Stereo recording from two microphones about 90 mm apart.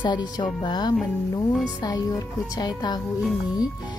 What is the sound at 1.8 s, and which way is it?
Music, 45° left (ahead or behind).